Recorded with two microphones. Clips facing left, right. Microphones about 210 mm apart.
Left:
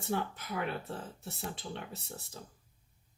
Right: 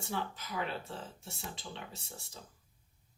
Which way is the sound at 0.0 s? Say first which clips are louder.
Left 4 dB; 60° left (ahead or behind).